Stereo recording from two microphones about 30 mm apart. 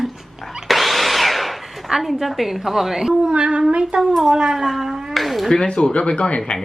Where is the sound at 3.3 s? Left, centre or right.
Right.